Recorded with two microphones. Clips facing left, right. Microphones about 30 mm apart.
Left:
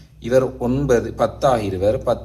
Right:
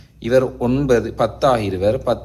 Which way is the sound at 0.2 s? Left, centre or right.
Right.